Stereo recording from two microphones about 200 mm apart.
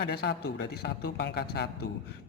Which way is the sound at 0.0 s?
55° left (ahead or behind).